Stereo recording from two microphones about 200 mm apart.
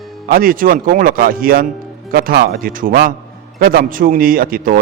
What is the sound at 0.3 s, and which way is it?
A man's voice, 45° right (ahead or behind).